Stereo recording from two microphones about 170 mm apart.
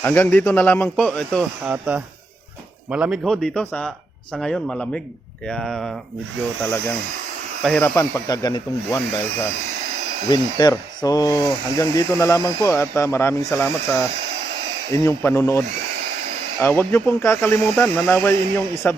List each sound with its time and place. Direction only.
0.0 s speech: 10° left (ahead or behind)
1.6 s speech: 10° right (ahead or behind)
7.6 s speech: centre (ahead or behind)
7.9 s speech: 20° left (ahead or behind)
10.2 s speech: 25° left (ahead or behind)